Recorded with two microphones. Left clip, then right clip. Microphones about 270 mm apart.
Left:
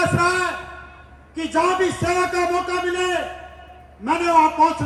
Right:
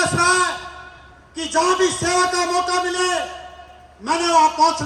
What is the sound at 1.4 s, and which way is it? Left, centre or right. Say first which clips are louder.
A man's voice: right 1 dB; right.